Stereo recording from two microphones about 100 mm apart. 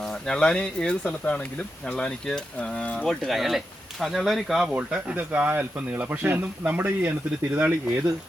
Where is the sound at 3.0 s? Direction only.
Centre (ahead or behind).